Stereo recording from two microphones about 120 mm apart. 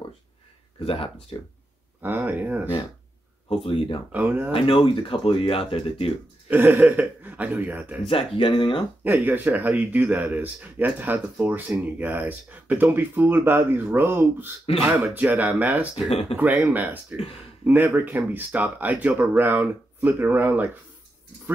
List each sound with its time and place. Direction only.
0.8 s speech: 50° left (ahead or behind)
2.0 s speech: 15° right (ahead or behind)
3.4 s speech: 50° left (ahead or behind)
4.1 s speech: 15° right (ahead or behind)
4.5 s speech: 50° left (ahead or behind)
6.5 s speech: 15° right (ahead or behind)
8.1 s speech: 50° left (ahead or behind)
9.0 s speech: 15° right (ahead or behind)
16.1 s speech: 55° left (ahead or behind)
16.3 s speech: 10° right (ahead or behind)